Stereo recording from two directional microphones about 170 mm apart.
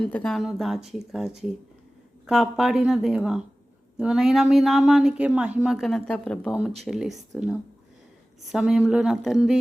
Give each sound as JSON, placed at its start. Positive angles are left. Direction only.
{"t": 0.0, "sound": "a woman's voice", "side_deg": 5}